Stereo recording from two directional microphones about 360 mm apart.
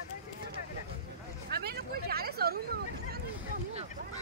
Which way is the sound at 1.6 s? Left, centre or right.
Right.